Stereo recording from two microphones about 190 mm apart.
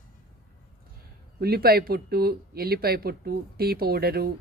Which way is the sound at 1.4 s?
55° right (ahead or behind).